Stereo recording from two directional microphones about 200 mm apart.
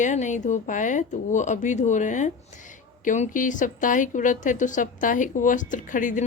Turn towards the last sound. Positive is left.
turn(degrees=40)  # may be behind; listen again after turning